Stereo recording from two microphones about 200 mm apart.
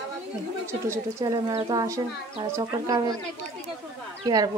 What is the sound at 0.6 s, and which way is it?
Speech, 15° right (ahead or behind).